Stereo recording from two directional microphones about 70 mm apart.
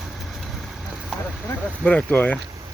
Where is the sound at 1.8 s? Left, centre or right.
Left.